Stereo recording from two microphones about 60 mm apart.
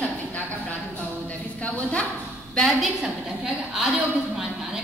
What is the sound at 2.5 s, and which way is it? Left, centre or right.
Speech, centre.